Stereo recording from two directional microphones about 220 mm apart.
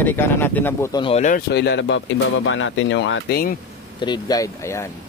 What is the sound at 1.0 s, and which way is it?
Speech, 30° left (ahead or behind).